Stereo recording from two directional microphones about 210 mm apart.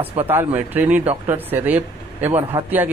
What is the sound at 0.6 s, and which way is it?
Speech, 5° right (ahead or behind).